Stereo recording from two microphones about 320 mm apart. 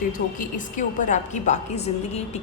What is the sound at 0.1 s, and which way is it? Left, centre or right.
A woman's voice, left.